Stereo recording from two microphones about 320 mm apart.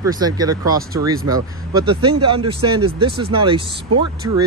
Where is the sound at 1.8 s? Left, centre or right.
Centre.